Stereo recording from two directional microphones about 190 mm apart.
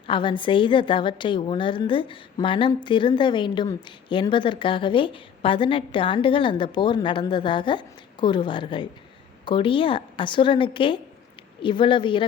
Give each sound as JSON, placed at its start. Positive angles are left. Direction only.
{"t": 0.1, "sound": "a woman's voice", "side_deg": 25}